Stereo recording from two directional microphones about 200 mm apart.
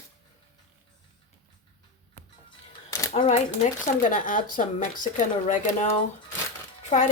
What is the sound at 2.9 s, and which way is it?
Camera, 15° left (ahead or behind).